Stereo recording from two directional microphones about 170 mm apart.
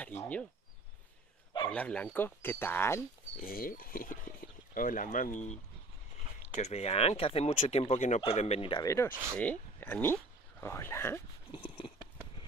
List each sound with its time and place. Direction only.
0.0 s speech: 10° left (ahead or behind)
1.7 s speech: 5° left (ahead or behind)
3.4 s speech: 60° left (ahead or behind); by 8.8 s 30° left (ahead or behind)
8.8 s speech: 15° left (ahead or behind)
9.1 s speech: 15° right (ahead or behind)
9.4 s speech: 10° left (ahead or behind)
11.5 s a sound: 30° left (ahead or behind)